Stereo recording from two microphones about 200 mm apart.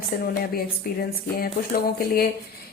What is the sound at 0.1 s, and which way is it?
Speech, 45° left (ahead or behind).